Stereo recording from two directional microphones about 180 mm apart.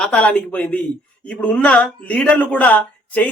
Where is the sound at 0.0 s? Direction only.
5° left (ahead or behind).